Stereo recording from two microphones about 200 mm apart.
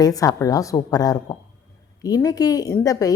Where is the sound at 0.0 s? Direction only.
15° left (ahead or behind).